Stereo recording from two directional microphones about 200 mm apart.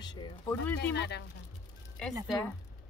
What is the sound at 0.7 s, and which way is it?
Speech, 55° left (ahead or behind).